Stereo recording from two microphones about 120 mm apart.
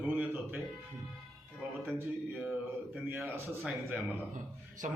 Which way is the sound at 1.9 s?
10° right (ahead or behind).